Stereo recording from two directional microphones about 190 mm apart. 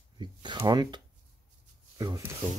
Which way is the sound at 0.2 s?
25° right (ahead or behind).